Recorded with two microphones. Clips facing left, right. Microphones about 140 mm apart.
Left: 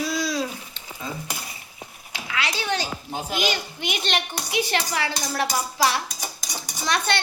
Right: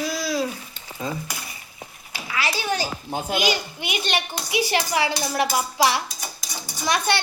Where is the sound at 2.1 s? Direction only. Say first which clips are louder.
Right 1 dB; 5° right (ahead or behind).